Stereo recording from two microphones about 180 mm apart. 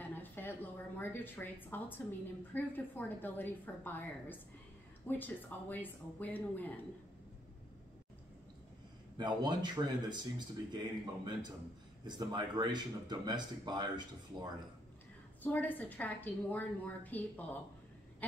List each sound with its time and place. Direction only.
0.0 s a woman's voice: 10° left (ahead or behind)
9.2 s speech: 25° right (ahead or behind)
15.4 s a woman's voice: 10° left (ahead or behind)